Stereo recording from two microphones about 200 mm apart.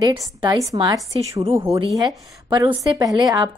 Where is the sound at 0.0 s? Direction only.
20° right (ahead or behind).